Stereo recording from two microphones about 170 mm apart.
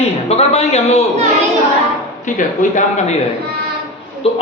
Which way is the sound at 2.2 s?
50° left (ahead or behind).